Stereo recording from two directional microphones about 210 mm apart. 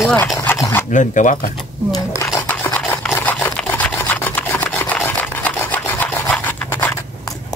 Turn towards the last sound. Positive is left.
turn(degrees=10)  # may be behind; listen again after turning